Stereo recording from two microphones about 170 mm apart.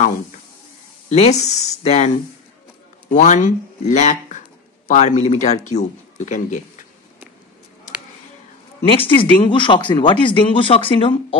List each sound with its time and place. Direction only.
1.0 s a sound: 40° left (ahead or behind)
1.4 s speech: 40° left (ahead or behind)
8.8 s speech: 30° left (ahead or behind)